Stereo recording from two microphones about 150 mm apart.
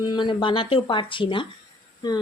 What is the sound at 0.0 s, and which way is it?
Speech, 30° left (ahead or behind).